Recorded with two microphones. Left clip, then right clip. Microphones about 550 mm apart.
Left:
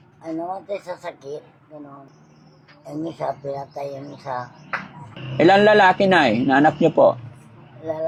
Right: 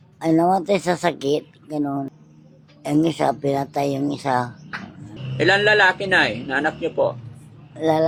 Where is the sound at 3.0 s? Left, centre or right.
Right.